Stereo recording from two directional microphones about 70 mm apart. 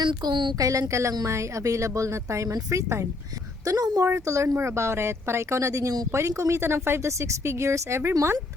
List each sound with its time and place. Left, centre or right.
0.2 s a woman's voice: right
0.6 s speech: right
3.7 s speech: right
4.0 s speech: right